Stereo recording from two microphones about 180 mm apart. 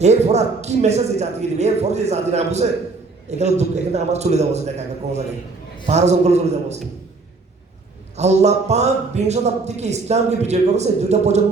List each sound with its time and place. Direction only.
0.0 s a man's voice: 40° right (ahead or behind)
5.8 s a man's voice: 40° right (ahead or behind)
8.1 s a man's voice: 40° right (ahead or behind)